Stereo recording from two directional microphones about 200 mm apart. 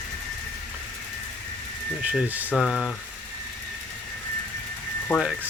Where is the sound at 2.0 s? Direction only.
10° right (ahead or behind).